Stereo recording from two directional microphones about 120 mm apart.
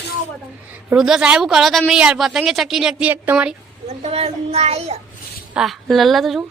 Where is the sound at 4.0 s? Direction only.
60° right (ahead or behind).